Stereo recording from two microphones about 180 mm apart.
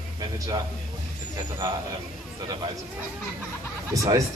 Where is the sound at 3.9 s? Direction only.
20° right (ahead or behind).